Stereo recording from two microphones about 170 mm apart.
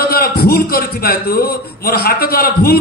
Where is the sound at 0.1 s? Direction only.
60° left (ahead or behind).